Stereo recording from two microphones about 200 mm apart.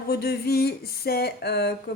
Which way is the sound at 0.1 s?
50° left (ahead or behind).